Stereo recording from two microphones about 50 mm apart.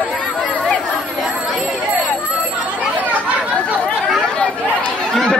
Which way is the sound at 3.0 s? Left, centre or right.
Left.